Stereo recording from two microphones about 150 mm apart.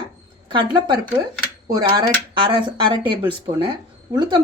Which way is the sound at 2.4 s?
30° right (ahead or behind).